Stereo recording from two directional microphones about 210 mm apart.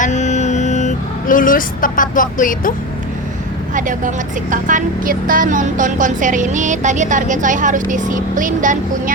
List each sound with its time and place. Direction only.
0.0 s vehicle: 35° left (ahead or behind)
3.8 s a woman's voice: 40° right (ahead or behind)